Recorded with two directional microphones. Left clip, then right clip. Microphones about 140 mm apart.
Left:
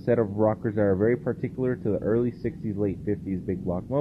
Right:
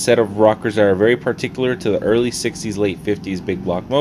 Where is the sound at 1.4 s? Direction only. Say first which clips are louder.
Right 9 dB; 35° right (ahead or behind).